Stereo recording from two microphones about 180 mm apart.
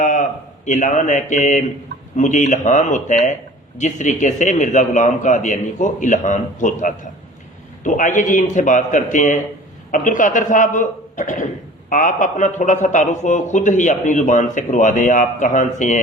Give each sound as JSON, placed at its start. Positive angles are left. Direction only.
{"t": 0.0, "sound": "a man's voice", "side_deg": 45}